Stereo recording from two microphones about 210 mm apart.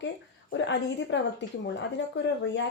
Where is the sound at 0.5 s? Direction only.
60° left (ahead or behind).